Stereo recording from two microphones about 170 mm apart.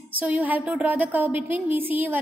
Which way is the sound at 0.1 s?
10° right (ahead or behind).